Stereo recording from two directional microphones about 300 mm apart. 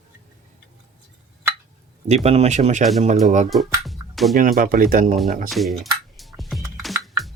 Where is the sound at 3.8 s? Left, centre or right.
Centre.